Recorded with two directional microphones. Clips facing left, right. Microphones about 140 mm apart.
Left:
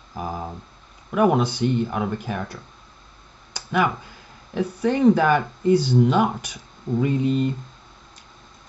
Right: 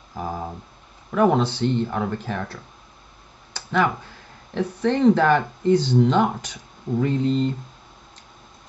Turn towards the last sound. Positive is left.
turn(degrees=10)  # may be behind; listen again after turning